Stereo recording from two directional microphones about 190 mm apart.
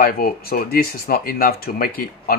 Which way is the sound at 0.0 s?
50° left (ahead or behind).